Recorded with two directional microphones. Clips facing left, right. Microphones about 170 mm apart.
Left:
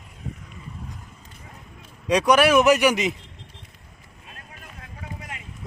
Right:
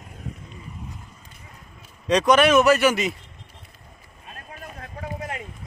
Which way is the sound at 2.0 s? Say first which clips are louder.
Even; 10° left (ahead or behind).